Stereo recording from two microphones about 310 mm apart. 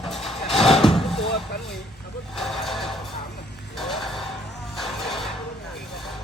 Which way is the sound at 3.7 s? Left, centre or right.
Centre.